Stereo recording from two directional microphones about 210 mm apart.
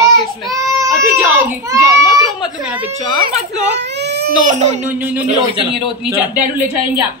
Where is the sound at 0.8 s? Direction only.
10° right (ahead or behind).